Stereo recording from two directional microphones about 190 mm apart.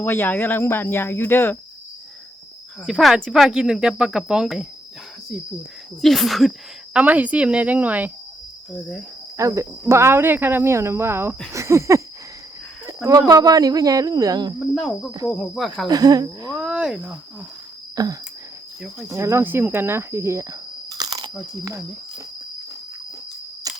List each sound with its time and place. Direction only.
0.0 s speech: 10° left (ahead or behind)
2.8 s speech: centre (ahead or behind)
6.0 s speech: centre (ahead or behind)
9.4 s speech: 15° right (ahead or behind)
14.6 s speech: centre (ahead or behind)
15.9 s speech: 20° right (ahead or behind)
16.6 s speech: 5° right (ahead or behind)
17.9 s a sound: 20° right (ahead or behind)
19.0 s speech: 15° right (ahead or behind)
23.7 s cap gun: 20° right (ahead or behind)